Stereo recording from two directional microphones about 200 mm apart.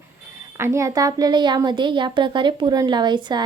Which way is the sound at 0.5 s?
15° right (ahead or behind).